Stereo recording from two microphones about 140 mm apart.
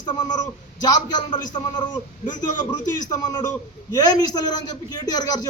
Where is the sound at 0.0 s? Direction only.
30° left (ahead or behind).